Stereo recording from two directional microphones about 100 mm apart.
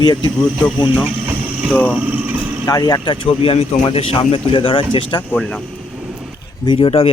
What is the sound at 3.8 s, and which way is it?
Speech, 55° left (ahead or behind).